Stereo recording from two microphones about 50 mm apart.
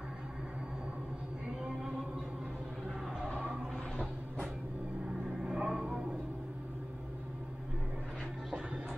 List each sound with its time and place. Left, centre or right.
5.4 s vehicle: centre